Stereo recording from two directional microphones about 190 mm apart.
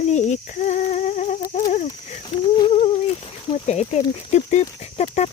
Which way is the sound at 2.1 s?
30° left (ahead or behind).